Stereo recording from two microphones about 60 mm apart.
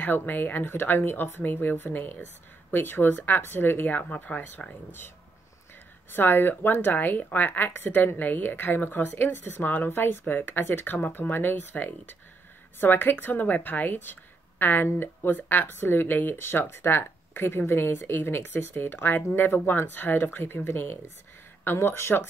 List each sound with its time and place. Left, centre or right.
0.0 s speech: left
6.1 s speech: left